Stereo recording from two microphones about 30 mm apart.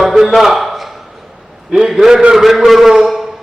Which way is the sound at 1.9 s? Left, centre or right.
Centre.